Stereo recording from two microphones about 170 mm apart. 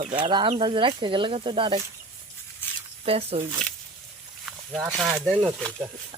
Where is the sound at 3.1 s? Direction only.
35° right (ahead or behind).